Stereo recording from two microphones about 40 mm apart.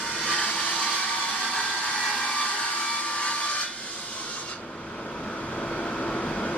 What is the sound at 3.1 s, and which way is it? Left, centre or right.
Wood, left.